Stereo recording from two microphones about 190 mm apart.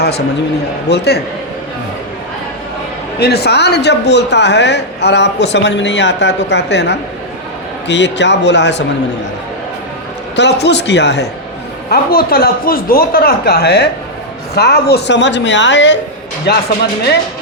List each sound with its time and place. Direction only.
0.9 s a man's voice: 60° left (ahead or behind)
3.2 s a man's voice: 60° left (ahead or behind)
10.3 s a man's voice: 65° left (ahead or behind)
11.9 s a man's voice: 50° left (ahead or behind); by 16.0 s 70° left (ahead or behind)
16.5 s a man's voice: 60° left (ahead or behind)